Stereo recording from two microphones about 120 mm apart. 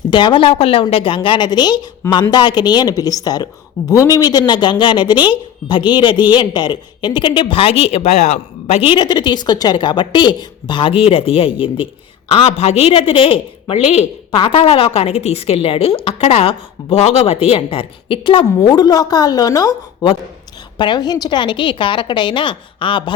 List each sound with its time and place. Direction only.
0.1 s a woman's voice: 40° left (ahead or behind)
12.3 s a woman's voice: 65° left (ahead or behind)
14.3 s a woman's voice: 40° left (ahead or behind)